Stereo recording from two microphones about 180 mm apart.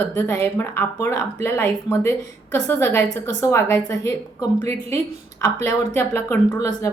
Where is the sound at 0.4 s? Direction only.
10° left (ahead or behind).